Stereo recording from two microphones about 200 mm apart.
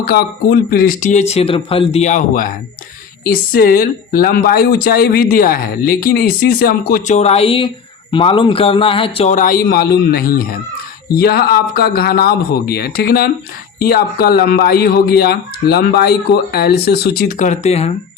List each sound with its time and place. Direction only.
0.0 s speech: 50° left (ahead or behind)
3.5 s speech: 45° left (ahead or behind)
7.2 s a man's voice: 30° left (ahead or behind)